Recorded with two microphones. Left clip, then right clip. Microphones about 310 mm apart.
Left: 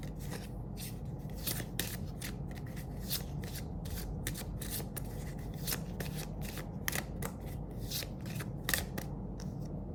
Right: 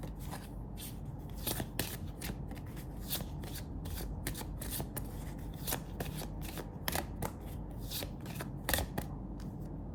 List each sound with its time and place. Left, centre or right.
5.6 s shuffling cards: centre
6.8 s scissors: centre